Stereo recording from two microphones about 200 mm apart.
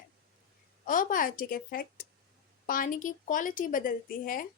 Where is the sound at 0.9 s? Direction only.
40° left (ahead or behind).